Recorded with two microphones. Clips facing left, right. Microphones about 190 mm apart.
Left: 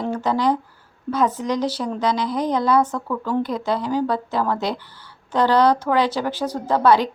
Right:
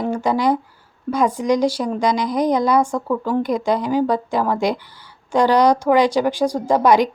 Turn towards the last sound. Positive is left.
turn(degrees=-15)  # may be behind; listen again after turning